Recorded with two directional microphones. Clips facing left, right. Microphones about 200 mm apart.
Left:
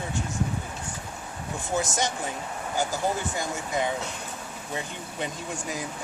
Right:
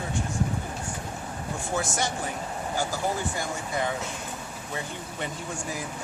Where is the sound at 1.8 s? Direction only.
20° left (ahead or behind).